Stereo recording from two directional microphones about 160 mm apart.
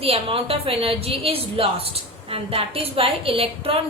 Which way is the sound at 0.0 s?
35° right (ahead or behind).